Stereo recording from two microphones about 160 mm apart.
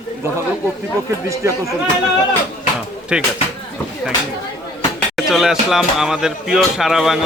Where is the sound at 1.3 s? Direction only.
20° right (ahead or behind).